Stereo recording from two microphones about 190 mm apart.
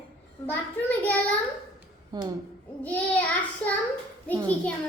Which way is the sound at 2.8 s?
10° left (ahead or behind).